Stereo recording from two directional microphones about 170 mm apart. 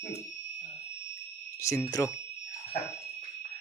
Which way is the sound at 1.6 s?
15° left (ahead or behind).